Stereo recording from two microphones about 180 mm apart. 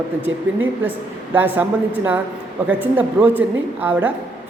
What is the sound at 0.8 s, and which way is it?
Speech, 10° right (ahead or behind).